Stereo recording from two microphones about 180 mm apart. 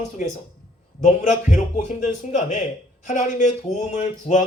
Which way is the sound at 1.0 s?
45° left (ahead or behind).